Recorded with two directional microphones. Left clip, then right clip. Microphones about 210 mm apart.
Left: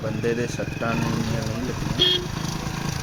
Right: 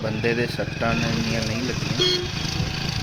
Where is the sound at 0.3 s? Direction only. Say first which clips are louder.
Right 2 dB; 5° right (ahead or behind).